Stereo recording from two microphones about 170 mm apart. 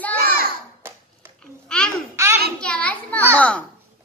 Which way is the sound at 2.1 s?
15° right (ahead or behind).